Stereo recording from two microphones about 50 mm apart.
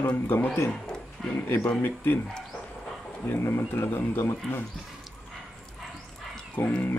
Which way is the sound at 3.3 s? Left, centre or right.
Left.